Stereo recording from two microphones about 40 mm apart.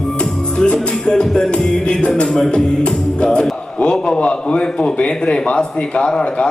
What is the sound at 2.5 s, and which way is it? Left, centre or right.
A man's voice, left.